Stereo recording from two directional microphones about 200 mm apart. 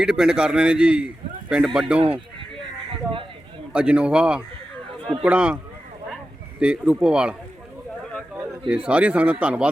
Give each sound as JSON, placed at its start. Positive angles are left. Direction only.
{"t": 0.0, "sound": "a man's voice", "side_deg": -5}
{"t": 2.0, "sound": "speech", "side_deg": -25}
{"t": 3.7, "sound": "a man's voice", "side_deg": -5}
{"t": 6.6, "sound": "a man's voice", "side_deg": -5}
{"t": 8.4, "sound": "a man's voice", "side_deg": -5}